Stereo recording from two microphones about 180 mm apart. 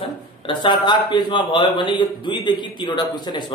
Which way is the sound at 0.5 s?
25° left (ahead or behind).